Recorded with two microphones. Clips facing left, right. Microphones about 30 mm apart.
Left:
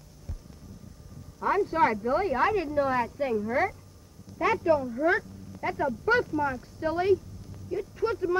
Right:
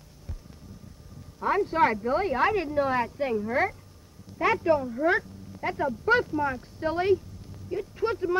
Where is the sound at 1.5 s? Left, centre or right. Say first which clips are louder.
Right 1 dB; right.